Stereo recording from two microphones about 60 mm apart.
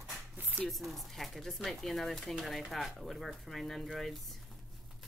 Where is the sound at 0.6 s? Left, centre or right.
Centre.